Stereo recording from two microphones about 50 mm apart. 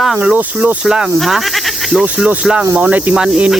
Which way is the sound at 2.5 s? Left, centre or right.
Centre.